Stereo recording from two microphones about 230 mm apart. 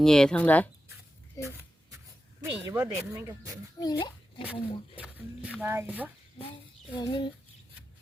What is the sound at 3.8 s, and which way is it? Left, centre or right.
Speech, centre.